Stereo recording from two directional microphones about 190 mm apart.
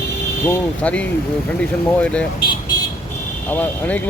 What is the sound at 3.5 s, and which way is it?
Speech, 10° left (ahead or behind).